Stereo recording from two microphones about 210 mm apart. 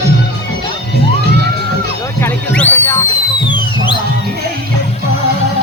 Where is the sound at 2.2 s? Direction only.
10° left (ahead or behind).